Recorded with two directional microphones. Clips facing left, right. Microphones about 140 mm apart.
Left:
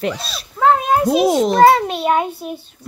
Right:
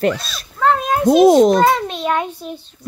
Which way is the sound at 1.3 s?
50° right (ahead or behind).